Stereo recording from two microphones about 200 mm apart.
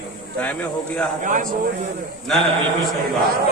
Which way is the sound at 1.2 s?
40° right (ahead or behind).